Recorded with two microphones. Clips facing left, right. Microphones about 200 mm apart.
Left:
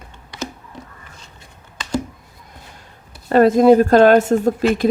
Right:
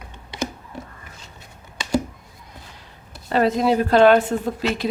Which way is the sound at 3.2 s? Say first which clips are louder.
Left 8 dB; 50° left (ahead or behind).